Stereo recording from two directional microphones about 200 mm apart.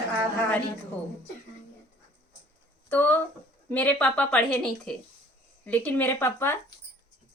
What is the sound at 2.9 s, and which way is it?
A woman's voice, 10° left (ahead or behind).